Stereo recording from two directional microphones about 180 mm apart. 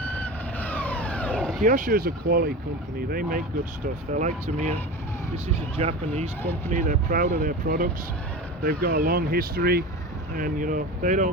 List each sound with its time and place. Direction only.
0.0 s vehicle: 10° left (ahead or behind)
1.6 s speech: 50° right (ahead or behind)
4.1 s speech: 45° right (ahead or behind)
5.7 s speech: 35° right (ahead or behind)